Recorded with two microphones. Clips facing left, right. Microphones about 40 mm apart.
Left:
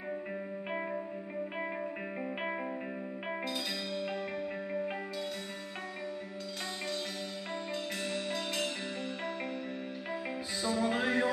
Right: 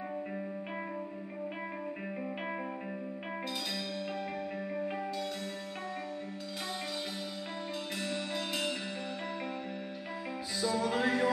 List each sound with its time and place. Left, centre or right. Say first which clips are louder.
3.9 s music: left 2 dB; centre
8.0 s music: right 2 dB; centre
10.6 s music: right 1 dB; left